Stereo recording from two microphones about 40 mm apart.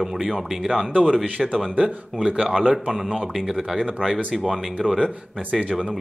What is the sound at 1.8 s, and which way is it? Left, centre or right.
Speech, centre.